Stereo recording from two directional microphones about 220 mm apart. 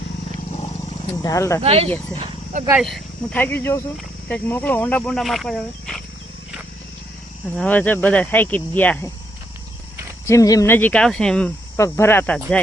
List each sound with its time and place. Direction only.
1.2 s speech: 15° left (ahead or behind)
1.6 s speech: 25° right (ahead or behind)
2.1 s a sound: 30° right (ahead or behind)
2.6 s speech: 5° right (ahead or behind)
7.5 s speech: 5° left (ahead or behind)
10.2 s speech: 15° left (ahead or behind)